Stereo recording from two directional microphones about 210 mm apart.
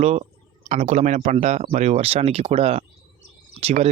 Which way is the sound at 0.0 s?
30° right (ahead or behind).